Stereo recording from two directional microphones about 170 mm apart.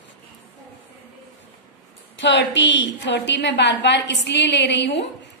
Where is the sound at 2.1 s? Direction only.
90° left.